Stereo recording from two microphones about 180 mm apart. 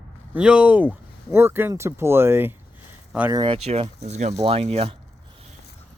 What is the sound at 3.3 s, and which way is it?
Speech, 30° right (ahead or behind).